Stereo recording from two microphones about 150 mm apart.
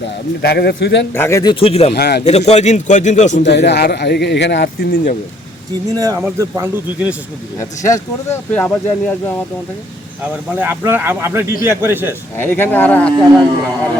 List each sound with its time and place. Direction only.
0.4 s a man's voice: 90° left
1.1 s speech: 15° left (ahead or behind)
1.5 s speech: 40° left (ahead or behind)
1.9 s a man's voice: 90° left
2.5 s a man's voice: 50° left (ahead or behind)
3.6 s a man's voice: 90° left
5.9 s a man's voice: 25° right (ahead or behind)
7.9 s speech: 20° left (ahead or behind)
10.5 s a man's voice: 10° right (ahead or behind)
12.4 s speech: 15° left (ahead or behind)